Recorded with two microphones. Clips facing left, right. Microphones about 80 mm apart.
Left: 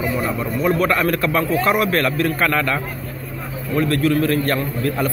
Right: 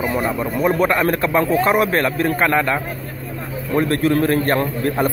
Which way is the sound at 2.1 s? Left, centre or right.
Right.